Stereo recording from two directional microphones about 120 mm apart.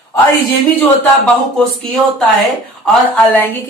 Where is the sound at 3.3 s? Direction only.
15° left (ahead or behind).